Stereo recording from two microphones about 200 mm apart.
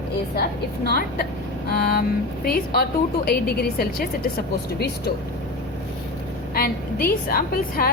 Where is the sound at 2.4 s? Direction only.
50° left (ahead or behind).